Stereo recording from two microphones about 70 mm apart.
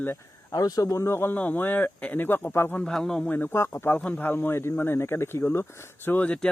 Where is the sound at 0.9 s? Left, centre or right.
Left.